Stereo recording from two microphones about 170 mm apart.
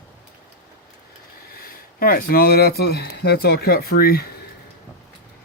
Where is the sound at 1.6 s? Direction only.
60° left (ahead or behind).